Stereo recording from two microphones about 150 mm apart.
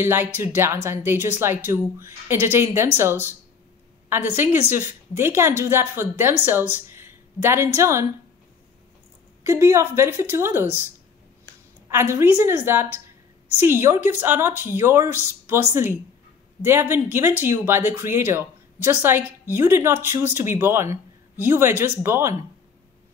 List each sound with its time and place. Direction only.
0.0 s speech: 15° right (ahead or behind)
9.4 s speech: 15° right (ahead or behind)
11.9 s speech: 15° right (ahead or behind)